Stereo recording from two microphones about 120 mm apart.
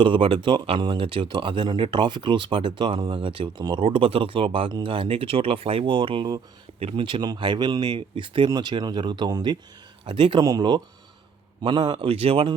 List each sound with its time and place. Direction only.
0.0 s speech: 45° right (ahead or behind)